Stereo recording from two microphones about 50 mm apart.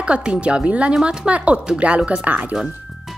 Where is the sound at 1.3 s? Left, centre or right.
Right.